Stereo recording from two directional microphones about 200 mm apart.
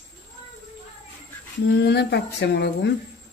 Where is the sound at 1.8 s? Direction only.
55° left (ahead or behind).